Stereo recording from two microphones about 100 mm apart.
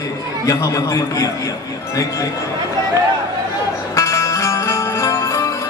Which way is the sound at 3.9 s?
30° left (ahead or behind).